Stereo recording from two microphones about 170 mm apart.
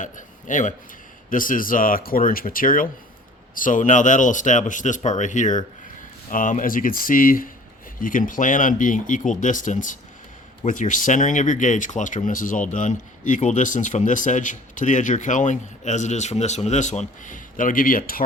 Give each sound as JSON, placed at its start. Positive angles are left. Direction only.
{"t": 0.0, "sound": "speech", "side_deg": 50}